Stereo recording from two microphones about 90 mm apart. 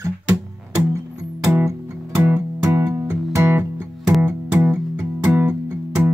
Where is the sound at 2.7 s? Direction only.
30° right (ahead or behind).